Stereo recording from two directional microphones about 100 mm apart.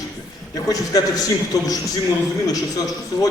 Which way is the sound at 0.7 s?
40° left (ahead or behind).